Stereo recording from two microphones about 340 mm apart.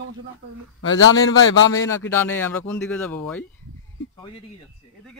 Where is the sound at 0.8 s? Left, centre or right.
Left.